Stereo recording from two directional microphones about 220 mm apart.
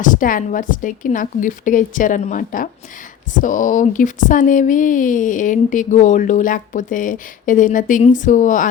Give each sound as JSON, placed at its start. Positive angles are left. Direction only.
{"t": 0.0, "sound": "a woman's voice", "side_deg": 35}